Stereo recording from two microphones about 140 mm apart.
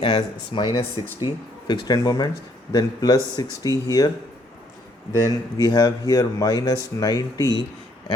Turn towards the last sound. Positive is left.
turn(degrees=25)  # may be behind; listen again after turning